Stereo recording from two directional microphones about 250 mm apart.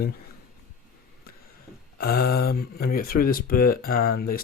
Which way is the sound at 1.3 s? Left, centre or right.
Left.